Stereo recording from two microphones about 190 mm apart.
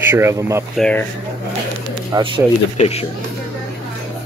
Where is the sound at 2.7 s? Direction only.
30° left (ahead or behind).